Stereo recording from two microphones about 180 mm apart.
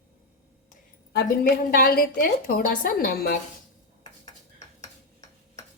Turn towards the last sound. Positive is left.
turn(degrees=20)  # may be behind; listen again after turning